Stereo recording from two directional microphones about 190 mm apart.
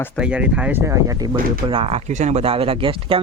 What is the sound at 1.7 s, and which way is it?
Speech, 30° right (ahead or behind).